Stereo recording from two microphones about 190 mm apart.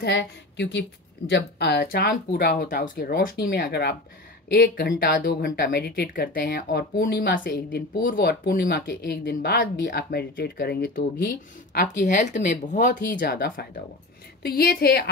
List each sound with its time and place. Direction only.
0.0 s speech: 65° left (ahead or behind)